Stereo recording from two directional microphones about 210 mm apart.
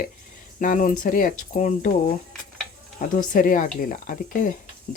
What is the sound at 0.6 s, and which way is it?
Speech, 40° left (ahead or behind).